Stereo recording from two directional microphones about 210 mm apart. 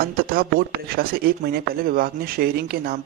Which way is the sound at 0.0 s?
45° right (ahead or behind).